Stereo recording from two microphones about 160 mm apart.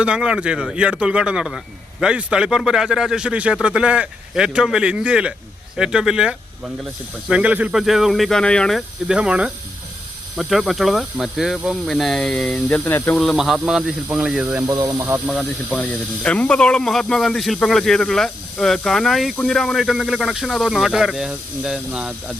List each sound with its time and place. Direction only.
0.0 s speech: 5° right (ahead or behind)
9.0 s speech: 5° right (ahead or behind)
14.7 s speech: 20° right (ahead or behind)
15.3 s speech: 5° left (ahead or behind)